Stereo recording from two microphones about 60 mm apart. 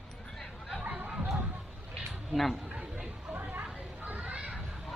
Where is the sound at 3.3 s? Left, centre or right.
Right.